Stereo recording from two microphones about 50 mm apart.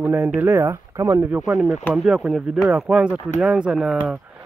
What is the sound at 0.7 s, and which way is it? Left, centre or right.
Speech, right.